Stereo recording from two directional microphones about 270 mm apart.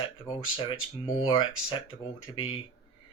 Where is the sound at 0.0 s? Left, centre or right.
Centre.